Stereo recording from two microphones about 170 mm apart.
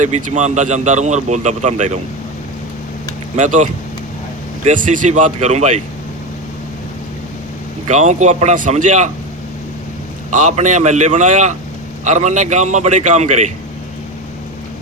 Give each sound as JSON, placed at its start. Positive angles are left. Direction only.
{"t": 0.0, "sound": "speech", "side_deg": -45}
{"t": 3.3, "sound": "speech", "side_deg": -50}
{"t": 7.9, "sound": "speech", "side_deg": -45}
{"t": 10.3, "sound": "speech", "side_deg": -45}